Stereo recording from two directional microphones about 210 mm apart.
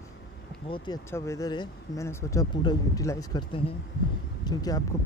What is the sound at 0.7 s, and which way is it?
Speech, 25° left (ahead or behind).